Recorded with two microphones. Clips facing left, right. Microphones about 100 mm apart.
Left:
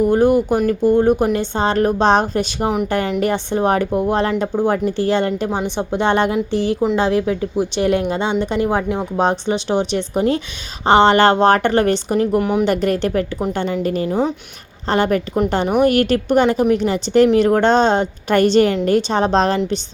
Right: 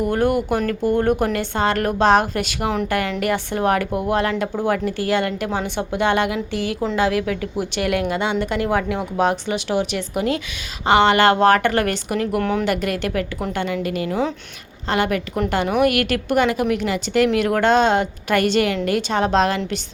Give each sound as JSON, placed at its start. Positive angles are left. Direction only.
{"t": 0.0, "sound": "a woman's voice", "side_deg": 20}
{"t": 12.4, "sound": "speech", "side_deg": 15}
{"t": 12.6, "sound": "a woman's voice", "side_deg": 35}
{"t": 14.1, "sound": "speech", "side_deg": 20}
{"t": 14.8, "sound": "a woman's voice", "side_deg": 35}